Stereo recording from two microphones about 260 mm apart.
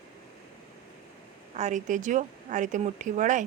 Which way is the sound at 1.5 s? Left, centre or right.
Right.